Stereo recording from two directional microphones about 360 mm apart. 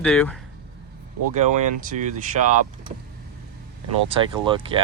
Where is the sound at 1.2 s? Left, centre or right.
Right.